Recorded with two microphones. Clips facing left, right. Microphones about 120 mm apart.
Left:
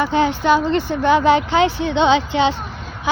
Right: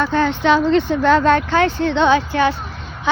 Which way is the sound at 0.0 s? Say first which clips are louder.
Even; 15° left (ahead or behind).